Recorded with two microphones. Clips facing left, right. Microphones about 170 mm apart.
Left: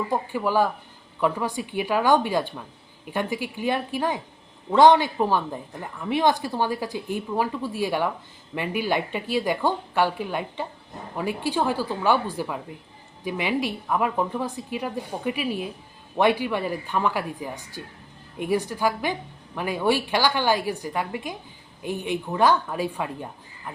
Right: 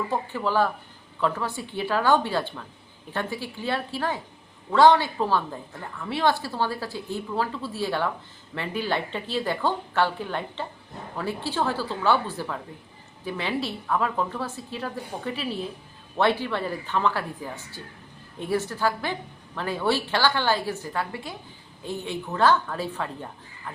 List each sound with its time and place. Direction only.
0.1 s a woman's voice: 15° left (ahead or behind)